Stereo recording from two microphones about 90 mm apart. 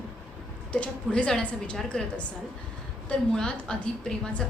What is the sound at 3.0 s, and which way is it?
A woman's voice, 5° left (ahead or behind).